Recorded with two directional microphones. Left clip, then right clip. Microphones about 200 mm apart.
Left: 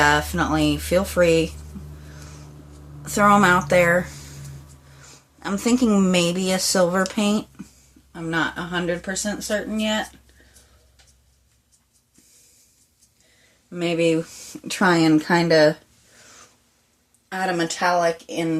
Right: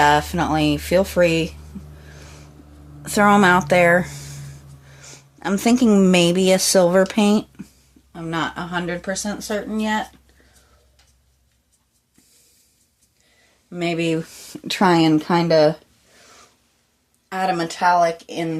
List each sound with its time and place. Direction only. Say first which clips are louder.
0.0 s speech: right 2 dB; 30° right (ahead or behind)
3.0 s speech: right 1 dB; 35° right (ahead or behind)
8.1 s speech: left 1 dB; 25° right (ahead or behind)
13.7 s speech: left 2 dB; 30° right (ahead or behind)
17.2 s speech: right 2 dB; 25° right (ahead or behind)